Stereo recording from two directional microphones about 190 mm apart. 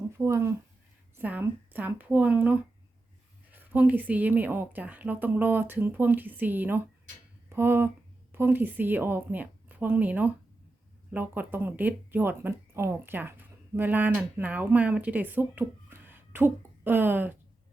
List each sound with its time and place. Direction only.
0.2 s a woman's voice: 15° right (ahead or behind)